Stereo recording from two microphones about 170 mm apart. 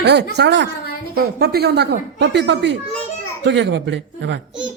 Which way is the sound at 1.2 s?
65° right (ahead or behind).